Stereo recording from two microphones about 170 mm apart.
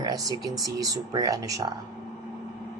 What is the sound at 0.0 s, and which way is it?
Speech, 20° right (ahead or behind).